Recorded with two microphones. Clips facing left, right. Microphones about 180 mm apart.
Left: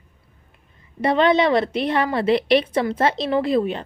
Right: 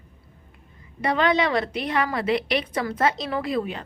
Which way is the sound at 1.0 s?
25° left (ahead or behind).